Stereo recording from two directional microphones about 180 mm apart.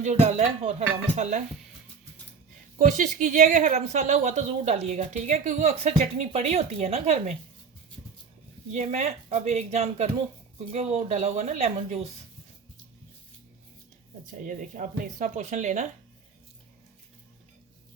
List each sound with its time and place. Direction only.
0.0 s a woman's voice: 40° right (ahead or behind)
2.7 s a woman's voice: 45° right (ahead or behind)
8.7 s a woman's voice: 40° right (ahead or behind)
14.4 s a woman's voice: 45° right (ahead or behind)